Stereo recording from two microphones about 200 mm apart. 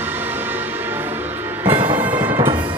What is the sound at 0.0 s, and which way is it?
Music, 10° right (ahead or behind).